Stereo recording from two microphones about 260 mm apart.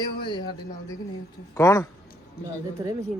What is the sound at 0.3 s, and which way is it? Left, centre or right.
A man's voice, centre.